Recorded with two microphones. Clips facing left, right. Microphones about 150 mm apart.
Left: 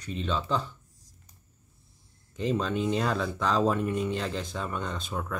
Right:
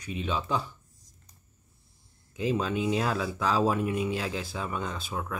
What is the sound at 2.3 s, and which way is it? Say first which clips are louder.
Speech: even; 5° right (ahead or behind).